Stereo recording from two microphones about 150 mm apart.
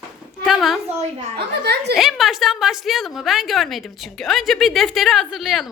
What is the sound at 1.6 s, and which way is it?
Speech, 90° right.